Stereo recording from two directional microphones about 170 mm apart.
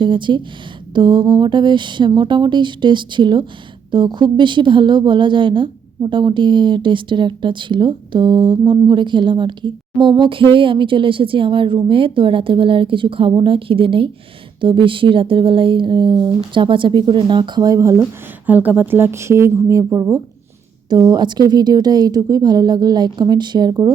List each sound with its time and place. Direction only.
0.0 s a woman's voice: 30° right (ahead or behind)